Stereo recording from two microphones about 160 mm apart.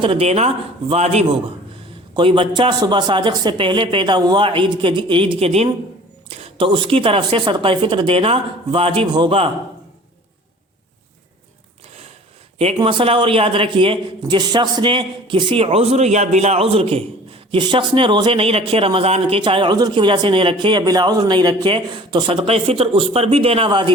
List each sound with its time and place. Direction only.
0.0 s speech: 35° right (ahead or behind)
12.5 s speech: 35° right (ahead or behind)